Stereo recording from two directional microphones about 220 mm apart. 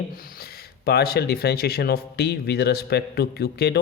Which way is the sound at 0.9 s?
45° left (ahead or behind).